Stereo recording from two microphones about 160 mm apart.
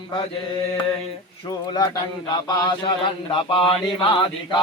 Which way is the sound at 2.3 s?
25° left (ahead or behind).